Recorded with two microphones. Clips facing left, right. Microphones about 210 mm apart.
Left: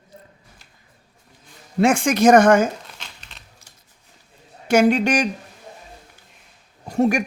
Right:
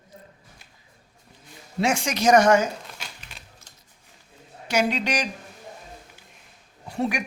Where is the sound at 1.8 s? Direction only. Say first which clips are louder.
Left 7 dB; 55° left (ahead or behind).